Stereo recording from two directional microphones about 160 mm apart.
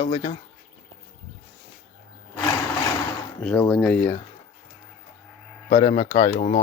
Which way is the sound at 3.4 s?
10° left (ahead or behind).